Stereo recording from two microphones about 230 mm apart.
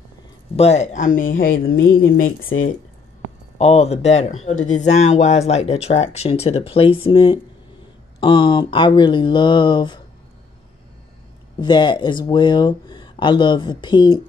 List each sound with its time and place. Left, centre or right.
0.6 s speech: left
3.5 s speech: left
11.6 s speech: centre